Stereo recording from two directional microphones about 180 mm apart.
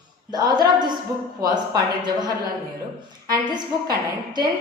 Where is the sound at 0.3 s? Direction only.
20° right (ahead or behind).